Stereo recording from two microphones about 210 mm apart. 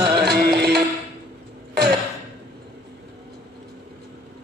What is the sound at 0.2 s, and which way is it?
Music, 50° right (ahead or behind).